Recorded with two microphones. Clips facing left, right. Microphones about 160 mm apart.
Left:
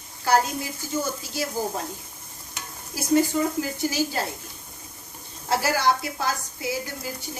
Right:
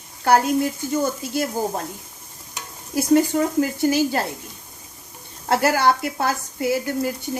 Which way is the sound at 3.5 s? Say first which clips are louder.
Right 7 dB; 60° right (ahead or behind).